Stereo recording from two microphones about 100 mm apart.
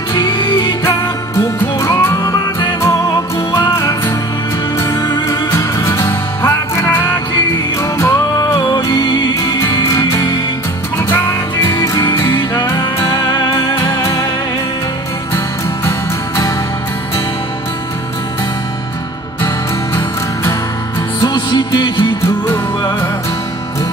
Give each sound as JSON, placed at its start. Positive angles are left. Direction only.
{"t": 0.1, "sound": "music", "side_deg": 45}
{"t": 0.8, "sound": "music", "side_deg": 30}
{"t": 5.0, "sound": "music", "side_deg": 35}
{"t": 8.7, "sound": "music", "side_deg": 45}
{"t": 11.0, "sound": "music", "side_deg": 20}
{"t": 21.2, "sound": "music", "side_deg": 45}
{"t": 22.5, "sound": "music", "side_deg": 20}